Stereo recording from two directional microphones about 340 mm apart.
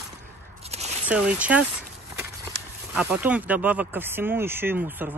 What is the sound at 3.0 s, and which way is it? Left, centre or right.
Speech, centre.